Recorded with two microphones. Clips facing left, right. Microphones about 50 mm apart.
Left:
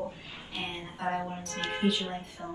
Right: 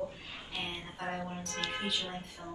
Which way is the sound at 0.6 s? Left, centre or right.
Centre.